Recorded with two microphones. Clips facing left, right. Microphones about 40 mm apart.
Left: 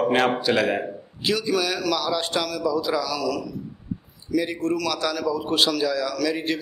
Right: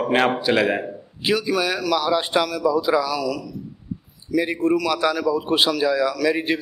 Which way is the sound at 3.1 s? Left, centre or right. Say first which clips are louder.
Right 1 dB; centre.